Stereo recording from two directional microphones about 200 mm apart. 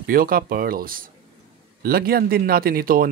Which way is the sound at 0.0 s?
45° right (ahead or behind).